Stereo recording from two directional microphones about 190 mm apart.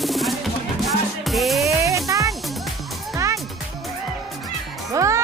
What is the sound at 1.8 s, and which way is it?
Music, 15° right (ahead or behind).